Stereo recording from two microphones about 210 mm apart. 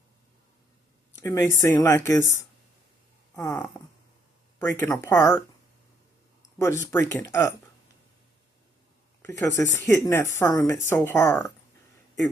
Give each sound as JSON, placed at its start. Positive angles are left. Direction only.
{"t": 1.2, "sound": "speech", "side_deg": 15}
{"t": 3.4, "sound": "speech", "side_deg": 20}
{"t": 6.6, "sound": "speech", "side_deg": 15}
{"t": 9.2, "sound": "speech", "side_deg": 15}